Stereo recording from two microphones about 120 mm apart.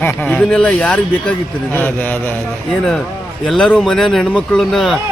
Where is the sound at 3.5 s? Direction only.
5° left (ahead or behind).